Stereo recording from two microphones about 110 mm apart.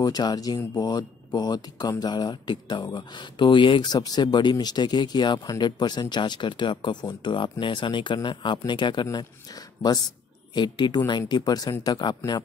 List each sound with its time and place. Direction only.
0.0 s speech: 40° left (ahead or behind)